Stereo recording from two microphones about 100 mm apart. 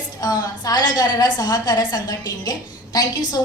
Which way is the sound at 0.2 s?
40° left (ahead or behind).